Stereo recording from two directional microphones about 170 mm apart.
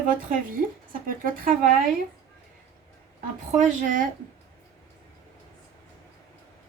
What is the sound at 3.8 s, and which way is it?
Speech, 50° right (ahead or behind).